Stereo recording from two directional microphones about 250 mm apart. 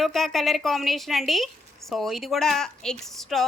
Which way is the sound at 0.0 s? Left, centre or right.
Centre.